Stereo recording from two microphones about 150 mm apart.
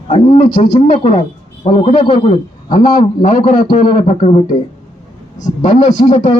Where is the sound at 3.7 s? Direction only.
55° left (ahead or behind).